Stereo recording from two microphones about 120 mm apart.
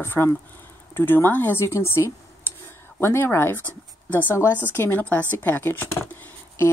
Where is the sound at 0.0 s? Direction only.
20° left (ahead or behind).